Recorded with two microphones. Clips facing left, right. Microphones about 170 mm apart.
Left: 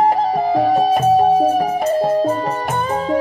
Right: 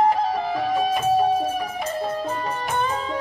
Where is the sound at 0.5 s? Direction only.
40° left (ahead or behind).